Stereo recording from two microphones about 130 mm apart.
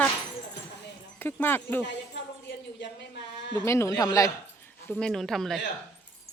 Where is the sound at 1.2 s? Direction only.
15° left (ahead or behind).